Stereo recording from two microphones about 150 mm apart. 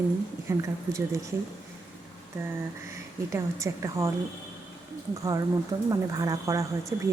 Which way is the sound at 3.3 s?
20° right (ahead or behind).